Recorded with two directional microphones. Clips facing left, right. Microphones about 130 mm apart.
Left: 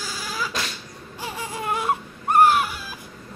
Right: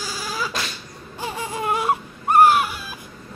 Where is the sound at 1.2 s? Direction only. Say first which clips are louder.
Right 4 dB; 20° right (ahead or behind).